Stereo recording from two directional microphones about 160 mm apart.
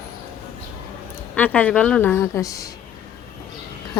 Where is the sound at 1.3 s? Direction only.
5° left (ahead or behind).